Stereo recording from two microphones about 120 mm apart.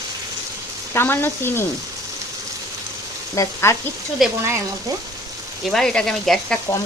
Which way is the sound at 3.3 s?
25° left (ahead or behind).